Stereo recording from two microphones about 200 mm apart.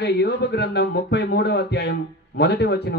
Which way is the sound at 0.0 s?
55° left (ahead or behind).